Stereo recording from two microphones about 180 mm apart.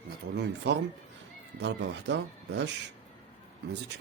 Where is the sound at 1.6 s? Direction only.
75° right (ahead or behind).